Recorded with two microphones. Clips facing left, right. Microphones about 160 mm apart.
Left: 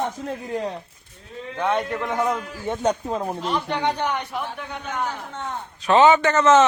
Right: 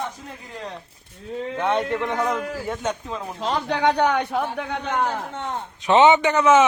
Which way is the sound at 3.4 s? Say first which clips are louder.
Right 6 dB; 90° right.